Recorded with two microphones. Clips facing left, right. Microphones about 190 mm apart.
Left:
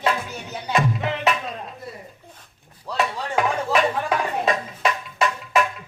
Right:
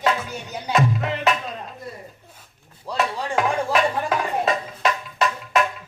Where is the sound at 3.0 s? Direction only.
Centre (ahead or behind).